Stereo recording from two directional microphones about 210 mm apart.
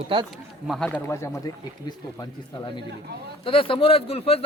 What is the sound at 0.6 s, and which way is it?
Speech, centre (ahead or behind).